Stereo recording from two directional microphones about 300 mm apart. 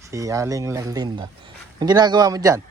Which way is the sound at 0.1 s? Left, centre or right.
Centre.